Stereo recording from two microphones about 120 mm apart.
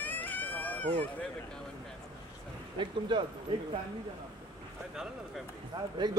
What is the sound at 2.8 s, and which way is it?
Speech, 40° right (ahead or behind).